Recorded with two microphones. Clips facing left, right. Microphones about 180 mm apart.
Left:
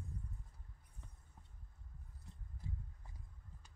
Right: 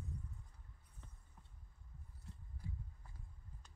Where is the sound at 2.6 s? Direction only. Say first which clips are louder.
Left 1 dB; 25° left (ahead or behind).